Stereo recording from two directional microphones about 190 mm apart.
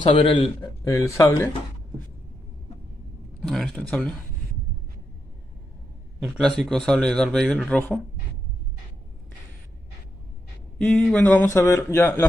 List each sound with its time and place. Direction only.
0.1 s a man's voice: 30° left (ahead or behind)
0.6 s speech: 15° left (ahead or behind)
3.3 s speech: 5° left (ahead or behind)
6.1 s a man's voice: centre (ahead or behind)
10.9 s speech: 5° left (ahead or behind)